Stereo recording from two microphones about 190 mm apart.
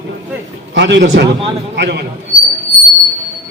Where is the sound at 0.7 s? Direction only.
70° right (ahead or behind).